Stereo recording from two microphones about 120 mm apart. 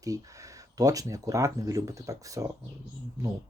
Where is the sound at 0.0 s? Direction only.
30° right (ahead or behind).